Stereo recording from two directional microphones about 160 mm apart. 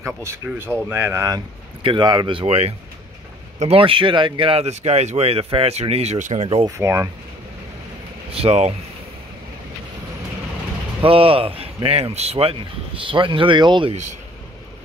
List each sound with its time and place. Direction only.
0.0 s speech: 15° right (ahead or behind); by 6.6 s 45° right (ahead or behind)
6.6 s speech: 15° right (ahead or behind)
8.3 s speech: 40° right (ahead or behind)
11.0 s speech: 35° right (ahead or behind)